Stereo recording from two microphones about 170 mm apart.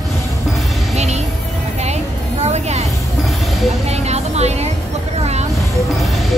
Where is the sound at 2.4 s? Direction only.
40° right (ahead or behind).